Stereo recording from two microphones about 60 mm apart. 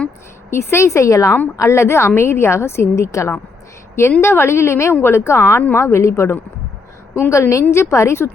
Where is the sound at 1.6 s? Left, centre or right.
Left.